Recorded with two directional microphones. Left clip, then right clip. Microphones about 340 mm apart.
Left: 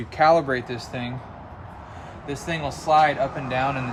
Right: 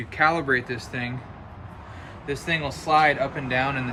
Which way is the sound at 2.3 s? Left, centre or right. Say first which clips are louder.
Right 2 dB; centre.